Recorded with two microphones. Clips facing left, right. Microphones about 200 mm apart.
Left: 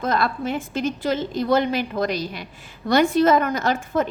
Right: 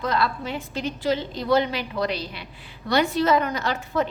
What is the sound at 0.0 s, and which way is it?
A woman's voice, 50° left (ahead or behind).